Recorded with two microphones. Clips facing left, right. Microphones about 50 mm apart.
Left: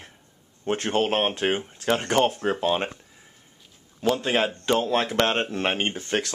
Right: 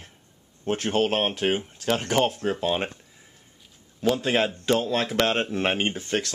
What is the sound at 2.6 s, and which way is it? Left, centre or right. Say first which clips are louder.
Speech: left 2 dB; centre.